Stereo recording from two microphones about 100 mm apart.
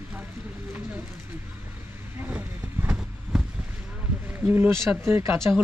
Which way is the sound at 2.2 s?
25° right (ahead or behind).